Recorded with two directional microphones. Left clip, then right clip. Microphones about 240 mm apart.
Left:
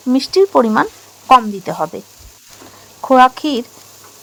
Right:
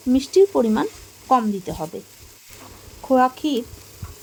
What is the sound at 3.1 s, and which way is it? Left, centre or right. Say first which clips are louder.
Speech: left 8 dB; centre.